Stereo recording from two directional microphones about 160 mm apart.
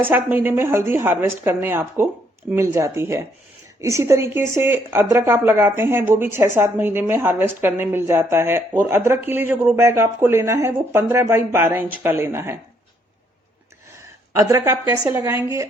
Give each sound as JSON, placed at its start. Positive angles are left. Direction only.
{"t": 0.0, "sound": "speech", "side_deg": -10}
{"t": 14.3, "sound": "a woman's voice", "side_deg": -20}